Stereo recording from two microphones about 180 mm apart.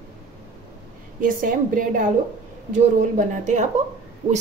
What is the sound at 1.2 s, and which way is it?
A woman's voice, 50° right (ahead or behind).